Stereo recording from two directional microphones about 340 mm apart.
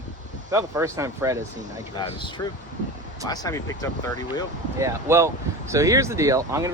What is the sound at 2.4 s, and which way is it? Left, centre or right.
Speech, centre.